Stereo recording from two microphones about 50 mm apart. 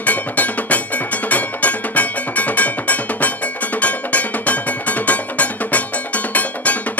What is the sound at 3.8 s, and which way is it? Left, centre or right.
Music, left.